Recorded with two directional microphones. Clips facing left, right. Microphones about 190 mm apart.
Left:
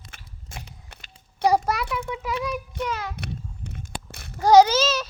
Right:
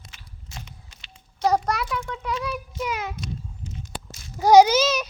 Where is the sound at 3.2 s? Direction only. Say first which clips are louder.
Even; 65° left (ahead or behind).